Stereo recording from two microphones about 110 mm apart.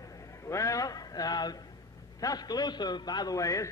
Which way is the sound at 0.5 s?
30° left (ahead or behind).